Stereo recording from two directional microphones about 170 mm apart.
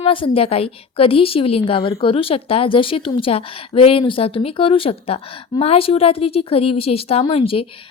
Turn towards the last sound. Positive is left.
turn(degrees=35)  # may be behind; listen again after turning